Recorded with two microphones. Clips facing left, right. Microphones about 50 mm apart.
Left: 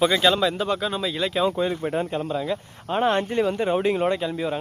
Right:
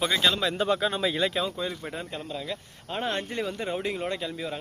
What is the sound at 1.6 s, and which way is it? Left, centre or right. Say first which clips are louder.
Speech: left 9 dB; left.